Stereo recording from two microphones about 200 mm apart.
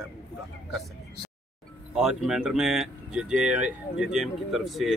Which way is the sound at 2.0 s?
5° right (ahead or behind).